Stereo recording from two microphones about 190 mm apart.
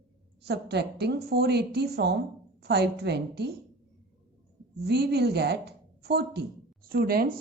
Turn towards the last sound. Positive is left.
turn(degrees=-50)  # may be behind; listen again after turning